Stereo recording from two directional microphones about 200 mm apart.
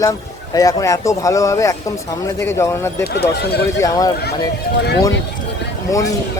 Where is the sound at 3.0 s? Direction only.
55° left (ahead or behind).